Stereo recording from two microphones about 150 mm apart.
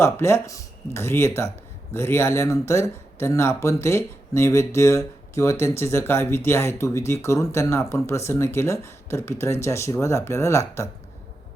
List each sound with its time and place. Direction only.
0.0 s speech: 15° left (ahead or behind)